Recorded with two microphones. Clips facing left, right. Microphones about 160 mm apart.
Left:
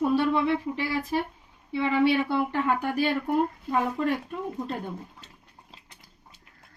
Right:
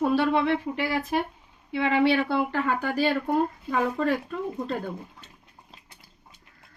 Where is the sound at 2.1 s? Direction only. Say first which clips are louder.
Right 1 dB; 90° right.